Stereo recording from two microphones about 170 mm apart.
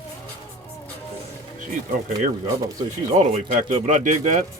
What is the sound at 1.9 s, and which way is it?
Speech, 50° right (ahead or behind).